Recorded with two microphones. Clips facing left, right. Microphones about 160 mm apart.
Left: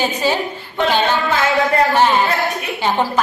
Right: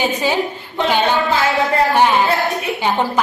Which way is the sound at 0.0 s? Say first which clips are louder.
Even; 15° right (ahead or behind).